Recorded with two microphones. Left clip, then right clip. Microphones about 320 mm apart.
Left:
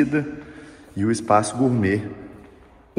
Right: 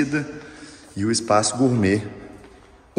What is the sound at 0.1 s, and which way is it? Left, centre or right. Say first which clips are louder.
A man's voice: left 2 dB; centre.